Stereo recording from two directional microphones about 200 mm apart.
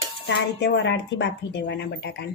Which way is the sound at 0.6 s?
65° left (ahead or behind).